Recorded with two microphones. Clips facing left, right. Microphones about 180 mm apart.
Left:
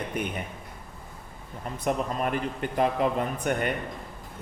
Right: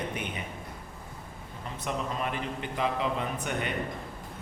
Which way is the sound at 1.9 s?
45° left (ahead or behind).